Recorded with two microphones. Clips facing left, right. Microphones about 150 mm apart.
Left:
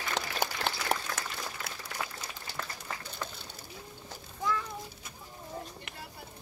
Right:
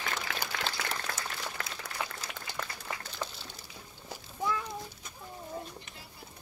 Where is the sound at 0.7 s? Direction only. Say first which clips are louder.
Left 4 dB; 65° left (ahead or behind).